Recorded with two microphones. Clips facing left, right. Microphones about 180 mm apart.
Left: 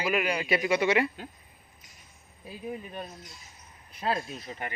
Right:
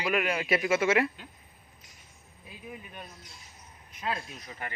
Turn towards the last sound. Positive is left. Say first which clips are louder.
# left 4 dB
turn(degrees=25)  # may be behind; listen again after turning